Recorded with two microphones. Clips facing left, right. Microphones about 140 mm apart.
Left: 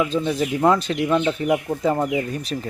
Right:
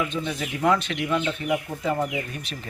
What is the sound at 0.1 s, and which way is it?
Speech, 35° left (ahead or behind).